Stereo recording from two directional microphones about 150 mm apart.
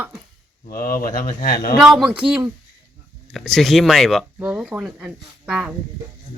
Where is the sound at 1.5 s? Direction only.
75° left (ahead or behind).